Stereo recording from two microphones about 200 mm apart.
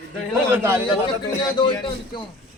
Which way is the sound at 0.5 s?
10° right (ahead or behind).